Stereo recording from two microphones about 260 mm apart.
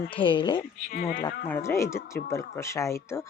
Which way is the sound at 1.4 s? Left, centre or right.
Centre.